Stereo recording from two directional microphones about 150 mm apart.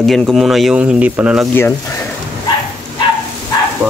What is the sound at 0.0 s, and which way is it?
Speech, centre (ahead or behind).